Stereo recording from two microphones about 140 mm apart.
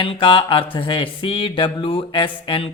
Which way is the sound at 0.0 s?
40° left (ahead or behind).